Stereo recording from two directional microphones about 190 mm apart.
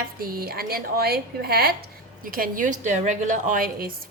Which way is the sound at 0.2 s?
50° right (ahead or behind).